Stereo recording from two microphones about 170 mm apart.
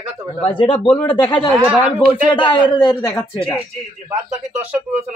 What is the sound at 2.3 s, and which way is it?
Speech, 30° left (ahead or behind).